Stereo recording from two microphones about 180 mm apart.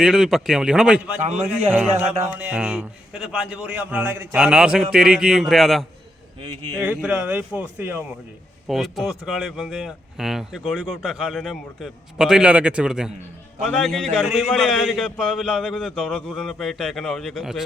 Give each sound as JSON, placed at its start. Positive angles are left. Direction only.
{"t": 0.0, "sound": "a man's voice", "side_deg": -5}
{"t": 1.2, "sound": "a man's voice", "side_deg": -40}
{"t": 2.2, "sound": "a man's voice", "side_deg": -10}
{"t": 6.4, "sound": "speech", "side_deg": -25}
{"t": 6.7, "sound": "a man's voice", "side_deg": -5}